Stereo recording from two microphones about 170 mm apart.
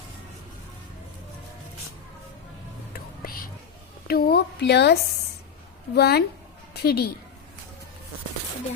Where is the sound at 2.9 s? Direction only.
60° left (ahead or behind).